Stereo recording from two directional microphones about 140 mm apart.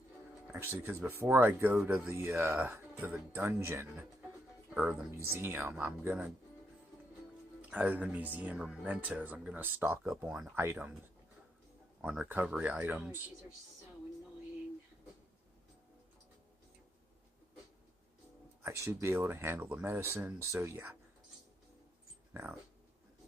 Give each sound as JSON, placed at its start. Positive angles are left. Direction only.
{"t": 0.4, "sound": "speech", "side_deg": -15}
{"t": 4.7, "sound": "speech", "side_deg": -10}
{"t": 5.1, "sound": "speech", "side_deg": -20}
{"t": 7.6, "sound": "speech", "side_deg": -10}
{"t": 12.0, "sound": "speech", "side_deg": -10}
{"t": 18.6, "sound": "speech", "side_deg": -20}
{"t": 22.3, "sound": "speech", "side_deg": -15}